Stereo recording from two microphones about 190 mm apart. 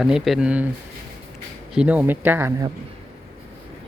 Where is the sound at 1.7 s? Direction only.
5° right (ahead or behind).